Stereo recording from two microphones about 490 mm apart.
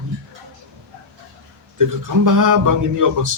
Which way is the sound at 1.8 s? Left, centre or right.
Right.